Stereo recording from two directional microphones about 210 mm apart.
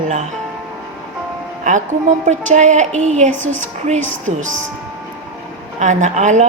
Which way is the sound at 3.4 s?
10° left (ahead or behind).